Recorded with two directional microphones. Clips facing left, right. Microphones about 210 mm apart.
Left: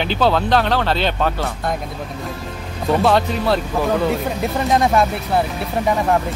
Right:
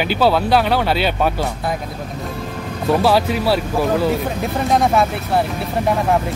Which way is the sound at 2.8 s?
5° right (ahead or behind).